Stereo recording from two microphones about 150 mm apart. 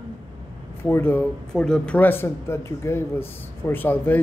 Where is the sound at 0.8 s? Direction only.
15° left (ahead or behind).